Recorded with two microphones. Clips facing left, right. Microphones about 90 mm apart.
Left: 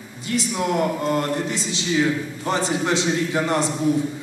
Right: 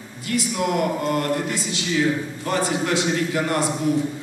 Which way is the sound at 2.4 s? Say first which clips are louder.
Left 1 dB; 25° left (ahead or behind).